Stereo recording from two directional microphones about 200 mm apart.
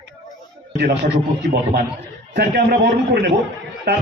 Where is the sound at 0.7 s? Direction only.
55° right (ahead or behind).